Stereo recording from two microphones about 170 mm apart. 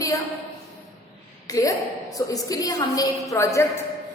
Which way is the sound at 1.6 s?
20° left (ahead or behind).